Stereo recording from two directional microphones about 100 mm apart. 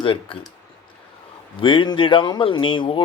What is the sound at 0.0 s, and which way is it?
Speech, 60° left (ahead or behind).